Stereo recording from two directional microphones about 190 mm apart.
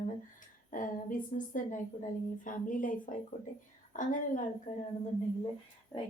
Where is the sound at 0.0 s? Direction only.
45° left (ahead or behind).